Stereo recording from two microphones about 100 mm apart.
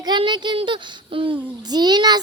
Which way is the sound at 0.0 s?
50° right (ahead or behind).